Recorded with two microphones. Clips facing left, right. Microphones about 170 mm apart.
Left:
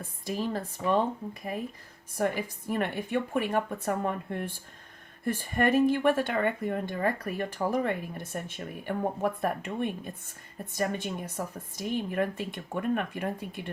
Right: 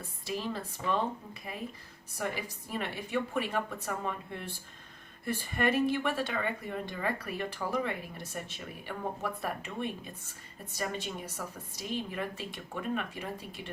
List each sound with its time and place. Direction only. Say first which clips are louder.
0.3 s speech: left 4 dB; 45° left (ahead or behind)